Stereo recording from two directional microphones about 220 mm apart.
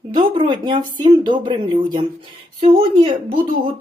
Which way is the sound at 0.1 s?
20° right (ahead or behind).